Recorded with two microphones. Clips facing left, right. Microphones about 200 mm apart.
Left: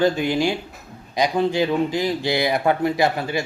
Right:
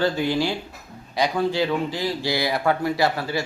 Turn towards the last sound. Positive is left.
turn(degrees=20)  # may be behind; listen again after turning